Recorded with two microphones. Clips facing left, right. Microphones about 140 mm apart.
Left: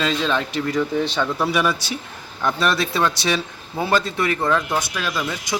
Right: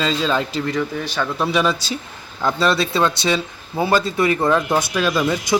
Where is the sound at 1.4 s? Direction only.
20° right (ahead or behind).